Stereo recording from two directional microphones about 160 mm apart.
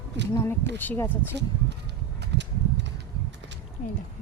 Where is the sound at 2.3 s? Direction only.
90° right.